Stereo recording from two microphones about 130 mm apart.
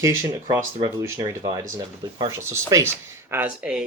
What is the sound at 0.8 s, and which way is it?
Speech, 25° right (ahead or behind).